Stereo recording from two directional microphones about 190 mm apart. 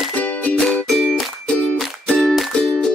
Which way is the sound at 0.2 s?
10° left (ahead or behind).